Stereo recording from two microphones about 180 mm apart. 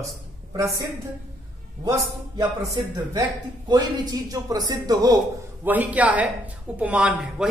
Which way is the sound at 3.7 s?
25° right (ahead or behind).